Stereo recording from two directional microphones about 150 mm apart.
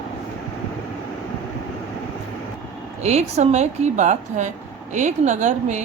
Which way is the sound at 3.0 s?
45° right (ahead or behind).